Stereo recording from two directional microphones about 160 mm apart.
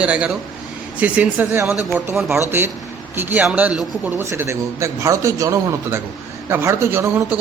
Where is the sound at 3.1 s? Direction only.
10° right (ahead or behind).